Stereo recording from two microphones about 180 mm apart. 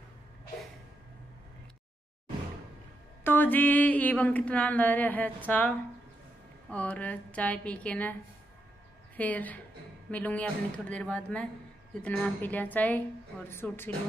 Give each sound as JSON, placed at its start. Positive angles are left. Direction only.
{"t": 3.3, "sound": "mantra", "side_deg": 10}
{"t": 9.1, "sound": "a woman's voice", "side_deg": 10}
{"t": 10.1, "sound": "mantra", "side_deg": 10}